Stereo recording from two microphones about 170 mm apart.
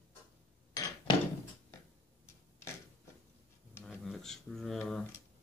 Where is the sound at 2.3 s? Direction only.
15° left (ahead or behind).